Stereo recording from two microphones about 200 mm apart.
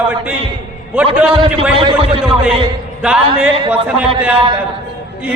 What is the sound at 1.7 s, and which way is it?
Speech, 25° right (ahead or behind).